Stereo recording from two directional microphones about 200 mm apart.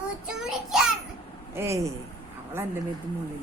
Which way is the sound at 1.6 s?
15° right (ahead or behind).